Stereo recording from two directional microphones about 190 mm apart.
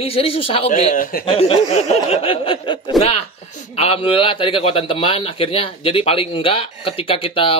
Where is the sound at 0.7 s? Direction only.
45° left (ahead or behind).